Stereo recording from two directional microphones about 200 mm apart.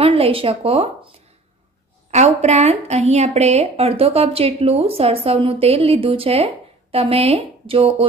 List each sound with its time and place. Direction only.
0.0 s a woman's voice: 30° right (ahead or behind)
2.0 s a woman's voice: 35° right (ahead or behind)